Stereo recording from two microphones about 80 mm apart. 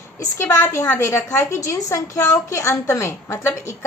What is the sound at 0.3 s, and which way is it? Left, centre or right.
A woman's voice, left.